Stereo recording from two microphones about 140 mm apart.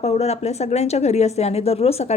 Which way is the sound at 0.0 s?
50° left (ahead or behind).